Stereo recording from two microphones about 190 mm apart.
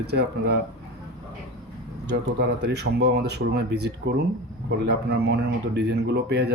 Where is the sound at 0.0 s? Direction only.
60° right (ahead or behind).